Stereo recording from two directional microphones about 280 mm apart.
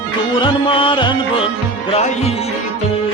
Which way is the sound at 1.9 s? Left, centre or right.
Left.